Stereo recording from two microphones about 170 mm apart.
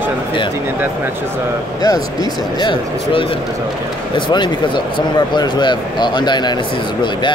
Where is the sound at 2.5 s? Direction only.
30° left (ahead or behind).